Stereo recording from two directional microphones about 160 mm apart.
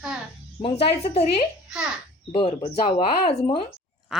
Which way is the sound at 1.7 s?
5° right (ahead or behind).